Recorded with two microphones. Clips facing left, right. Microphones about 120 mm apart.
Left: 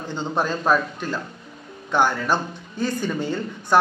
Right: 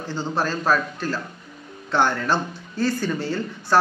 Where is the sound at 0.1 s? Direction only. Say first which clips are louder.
Left 1 dB; 20° left (ahead or behind).